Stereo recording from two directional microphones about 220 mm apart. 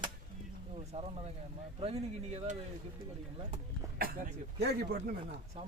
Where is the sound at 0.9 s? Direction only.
25° right (ahead or behind).